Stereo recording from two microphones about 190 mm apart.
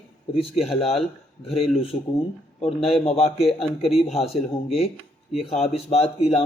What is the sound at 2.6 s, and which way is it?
Speech, 30° left (ahead or behind).